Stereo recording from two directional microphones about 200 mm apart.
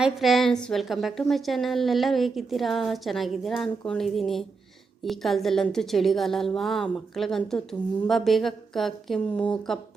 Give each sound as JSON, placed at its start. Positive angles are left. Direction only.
{"t": 0.0, "sound": "a woman's voice", "side_deg": 0}